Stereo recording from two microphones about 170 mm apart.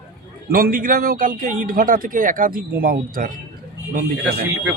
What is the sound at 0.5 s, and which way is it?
A man's voice, 55° right (ahead or behind).